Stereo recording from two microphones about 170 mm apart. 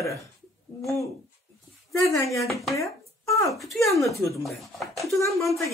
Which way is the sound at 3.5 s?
Centre (ahead or behind).